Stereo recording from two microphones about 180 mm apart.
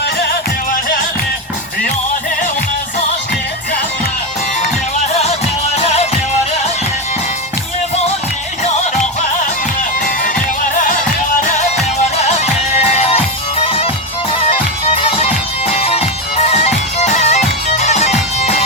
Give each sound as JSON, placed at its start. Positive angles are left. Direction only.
{"t": 5.7, "sound": "music", "side_deg": 35}
{"t": 10.2, "sound": "music", "side_deg": 45}
{"t": 12.1, "sound": "music", "side_deg": 35}